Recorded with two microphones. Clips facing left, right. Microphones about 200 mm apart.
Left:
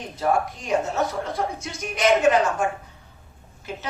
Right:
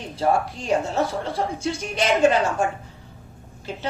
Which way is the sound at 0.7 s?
30° right (ahead or behind).